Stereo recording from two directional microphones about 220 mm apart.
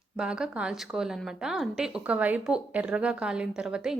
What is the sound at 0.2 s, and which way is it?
A woman's voice, 5° right (ahead or behind).